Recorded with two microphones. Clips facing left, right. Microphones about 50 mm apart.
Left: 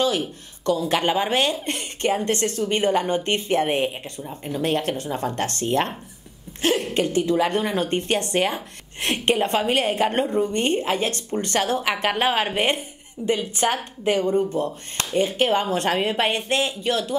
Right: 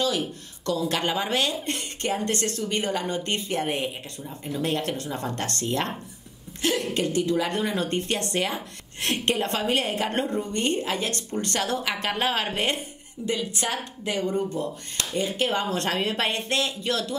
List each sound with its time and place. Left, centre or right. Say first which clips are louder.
0.0 s speech: left 3 dB; left